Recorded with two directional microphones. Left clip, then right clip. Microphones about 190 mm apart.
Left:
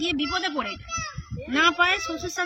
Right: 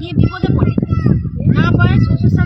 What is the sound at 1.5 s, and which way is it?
Speech, 5° left (ahead or behind).